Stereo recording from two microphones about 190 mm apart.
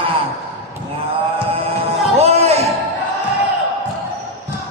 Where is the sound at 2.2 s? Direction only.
35° right (ahead or behind).